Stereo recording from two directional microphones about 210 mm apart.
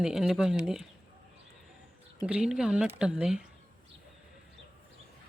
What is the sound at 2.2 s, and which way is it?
Speech, 5° right (ahead or behind).